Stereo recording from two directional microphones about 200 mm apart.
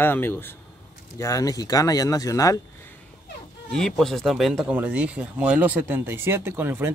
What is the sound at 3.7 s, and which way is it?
Speech, centre (ahead or behind).